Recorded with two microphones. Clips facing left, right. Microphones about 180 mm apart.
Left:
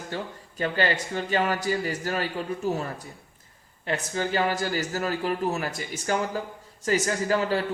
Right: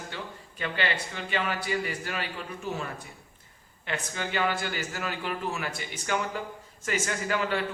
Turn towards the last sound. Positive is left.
turn(degrees=35)  # may be behind; listen again after turning